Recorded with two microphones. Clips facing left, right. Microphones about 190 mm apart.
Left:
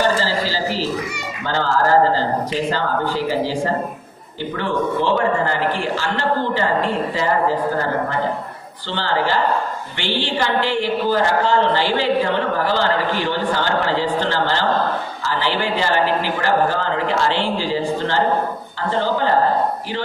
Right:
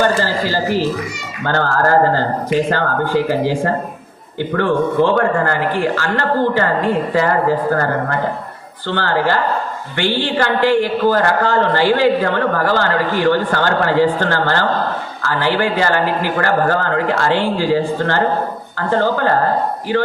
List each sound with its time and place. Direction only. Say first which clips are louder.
0.0 s a sound: right 3 dB; 55° right (ahead or behind)
1.5 s a man's voice: right 2 dB; 55° right (ahead or behind)
8.9 s a man's voice: right 3 dB; 50° right (ahead or behind)